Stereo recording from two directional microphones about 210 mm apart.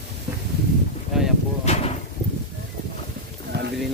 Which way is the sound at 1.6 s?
30° left (ahead or behind).